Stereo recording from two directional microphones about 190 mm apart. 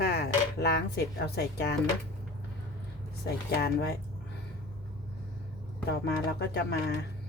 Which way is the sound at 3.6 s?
60° left (ahead or behind).